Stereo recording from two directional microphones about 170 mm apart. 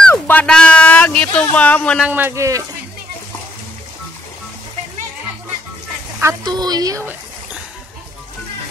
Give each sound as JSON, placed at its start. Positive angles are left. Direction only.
{"t": 0.1, "sound": "speech", "side_deg": 10}
{"t": 2.0, "sound": "a man's voice", "side_deg": -10}
{"t": 6.4, "sound": "a woman's voice", "side_deg": -25}